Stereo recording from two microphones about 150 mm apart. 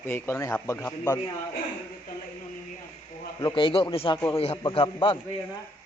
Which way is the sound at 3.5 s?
35° left (ahead or behind).